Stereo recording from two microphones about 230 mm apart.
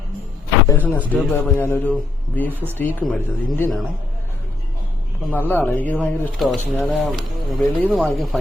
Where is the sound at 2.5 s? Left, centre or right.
Centre.